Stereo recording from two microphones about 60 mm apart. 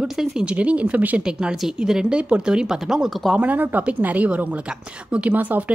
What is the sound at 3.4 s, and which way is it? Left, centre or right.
Speech, right.